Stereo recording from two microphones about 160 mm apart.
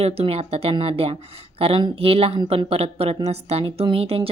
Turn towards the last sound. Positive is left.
turn(degrees=-35)  # may be behind; listen again after turning